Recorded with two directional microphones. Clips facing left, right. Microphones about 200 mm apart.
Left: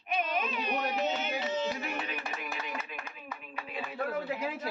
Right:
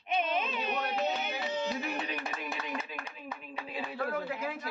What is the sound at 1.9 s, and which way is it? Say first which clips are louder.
Chopping: right 1 dB; 30° right (ahead or behind).